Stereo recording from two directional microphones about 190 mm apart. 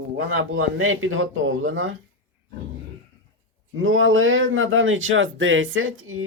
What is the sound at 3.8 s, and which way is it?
Speech, 90° right.